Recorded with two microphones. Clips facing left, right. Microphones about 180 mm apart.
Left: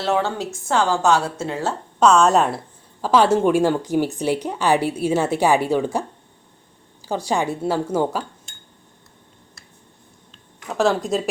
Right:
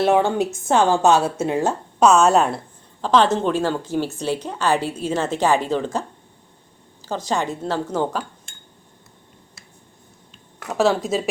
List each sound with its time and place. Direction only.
0.0 s a woman's voice: 15° right (ahead or behind); by 8.2 s 10° left (ahead or behind)
10.7 s speech: centre (ahead or behind)